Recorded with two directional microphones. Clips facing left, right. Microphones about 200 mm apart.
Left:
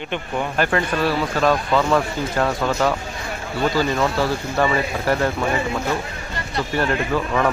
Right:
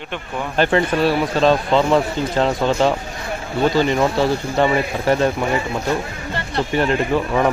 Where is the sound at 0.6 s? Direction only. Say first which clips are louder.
Right 5 dB; 25° right (ahead or behind).